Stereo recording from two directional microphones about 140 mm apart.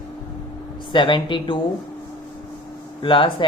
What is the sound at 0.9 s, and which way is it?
Speech, 35° left (ahead or behind).